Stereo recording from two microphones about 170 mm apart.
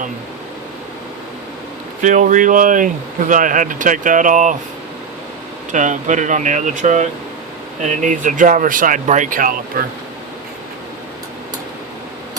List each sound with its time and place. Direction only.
2.0 s speech: 45° right (ahead or behind)
5.7 s speech: 45° right (ahead or behind)